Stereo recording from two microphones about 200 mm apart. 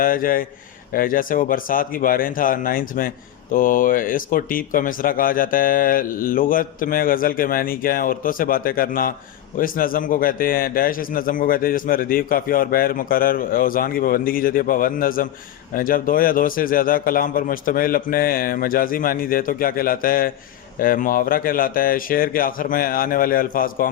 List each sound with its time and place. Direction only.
0.0 s a man's voice: 45° left (ahead or behind)